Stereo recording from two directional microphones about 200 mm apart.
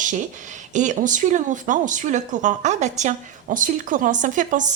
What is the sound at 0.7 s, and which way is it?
A woman's voice, 40° right (ahead or behind).